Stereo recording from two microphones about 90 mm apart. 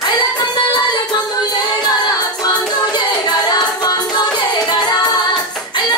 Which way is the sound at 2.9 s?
55° left (ahead or behind).